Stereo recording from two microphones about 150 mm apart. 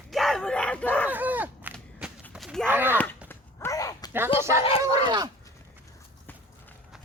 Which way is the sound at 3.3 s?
20° left (ahead or behind).